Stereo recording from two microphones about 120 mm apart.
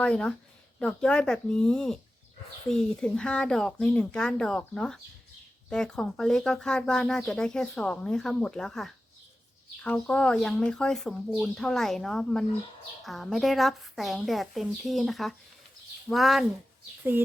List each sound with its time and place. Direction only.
0.0 s a woman's voice: 10° left (ahead or behind)
17.0 s speech: 15° right (ahead or behind)